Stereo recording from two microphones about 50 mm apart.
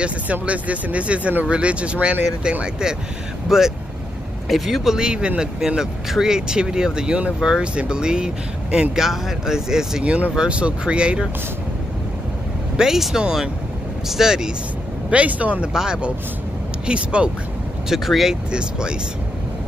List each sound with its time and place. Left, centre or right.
0.0 s speech: right; by 4.9 s centre
4.9 s speech: centre
10.0 s speech: right
12.7 s speech: centre
15.0 s speech: right
15.7 s speech: centre
17.8 s speech: centre
18.5 s speech: centre